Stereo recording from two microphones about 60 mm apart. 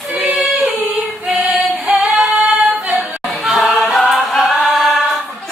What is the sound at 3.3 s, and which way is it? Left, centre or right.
Choir, centre.